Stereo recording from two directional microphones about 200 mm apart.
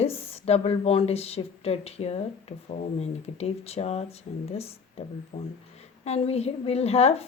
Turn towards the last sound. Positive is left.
turn(degrees=30)  # may be behind; listen again after turning